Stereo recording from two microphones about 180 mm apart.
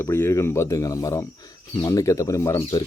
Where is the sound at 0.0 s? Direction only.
15° left (ahead or behind).